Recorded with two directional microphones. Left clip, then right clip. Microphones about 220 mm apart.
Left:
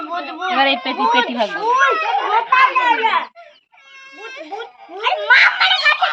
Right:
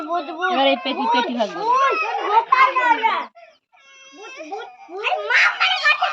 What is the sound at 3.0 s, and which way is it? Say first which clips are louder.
Speech: left 3 dB; 45° right (ahead or behind).